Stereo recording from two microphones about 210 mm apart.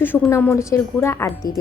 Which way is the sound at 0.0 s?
10° left (ahead or behind).